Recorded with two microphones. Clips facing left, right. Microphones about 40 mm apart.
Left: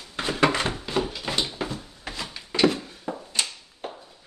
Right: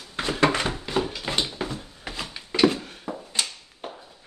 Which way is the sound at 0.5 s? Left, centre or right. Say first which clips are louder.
Even; centre.